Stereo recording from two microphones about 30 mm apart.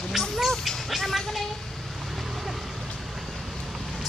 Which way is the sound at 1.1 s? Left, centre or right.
Centre.